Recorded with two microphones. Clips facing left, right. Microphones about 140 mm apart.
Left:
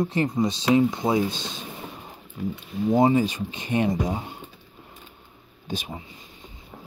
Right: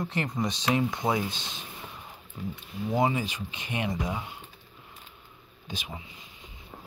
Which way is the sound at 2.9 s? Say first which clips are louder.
Left 7 dB; 35° left (ahead or behind).